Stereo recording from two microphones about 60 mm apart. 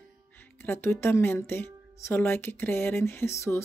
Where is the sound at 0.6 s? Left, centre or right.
Left.